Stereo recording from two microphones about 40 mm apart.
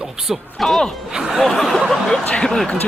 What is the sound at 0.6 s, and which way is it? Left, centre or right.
Speech, centre.